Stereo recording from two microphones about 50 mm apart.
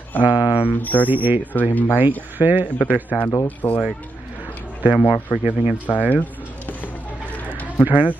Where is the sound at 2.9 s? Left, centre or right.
Left.